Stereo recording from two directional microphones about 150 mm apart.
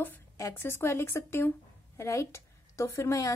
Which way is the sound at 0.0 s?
15° left (ahead or behind).